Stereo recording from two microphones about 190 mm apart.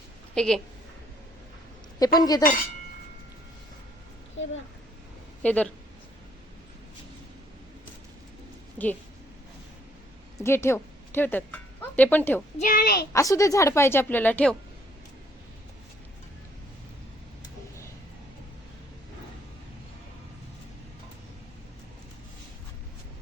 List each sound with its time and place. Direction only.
0.3 s a woman's voice: 5° left (ahead or behind)
2.0 s a woman's voice: 20° left (ahead or behind)
4.4 s speech: 80° left
5.4 s speech: 5° left (ahead or behind)
10.4 s a woman's voice: 15° left (ahead or behind)
12.5 s a woman's voice: 45° left (ahead or behind)
13.1 s a woman's voice: 15° left (ahead or behind)